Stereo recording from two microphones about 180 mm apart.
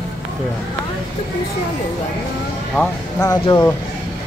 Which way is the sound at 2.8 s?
10° left (ahead or behind).